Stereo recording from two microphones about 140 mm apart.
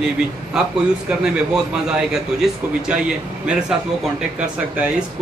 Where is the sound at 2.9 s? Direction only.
5° right (ahead or behind).